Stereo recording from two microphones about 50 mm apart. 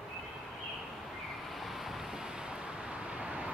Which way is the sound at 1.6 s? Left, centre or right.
Centre.